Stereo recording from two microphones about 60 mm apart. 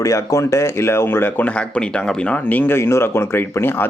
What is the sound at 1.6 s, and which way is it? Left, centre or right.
Speech, centre.